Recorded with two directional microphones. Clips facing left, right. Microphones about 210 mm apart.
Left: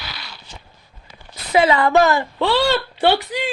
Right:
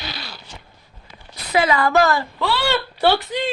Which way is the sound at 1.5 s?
25° left (ahead or behind).